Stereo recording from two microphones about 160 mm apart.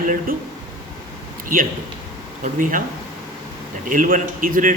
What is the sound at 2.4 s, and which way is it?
Speech, 55° right (ahead or behind).